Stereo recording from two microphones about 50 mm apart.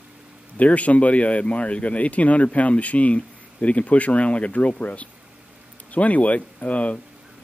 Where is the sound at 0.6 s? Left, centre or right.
Left.